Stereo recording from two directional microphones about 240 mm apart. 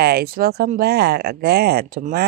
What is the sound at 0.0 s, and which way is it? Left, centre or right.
Speech, right.